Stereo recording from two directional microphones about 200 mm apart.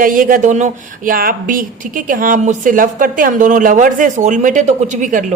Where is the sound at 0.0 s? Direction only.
45° right (ahead or behind).